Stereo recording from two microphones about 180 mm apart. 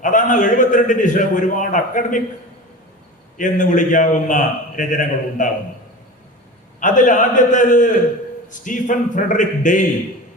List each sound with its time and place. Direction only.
0.0 s a man's voice: 45° left (ahead or behind)
3.3 s a man's voice: 45° left (ahead or behind)
6.7 s a man's voice: 45° left (ahead or behind)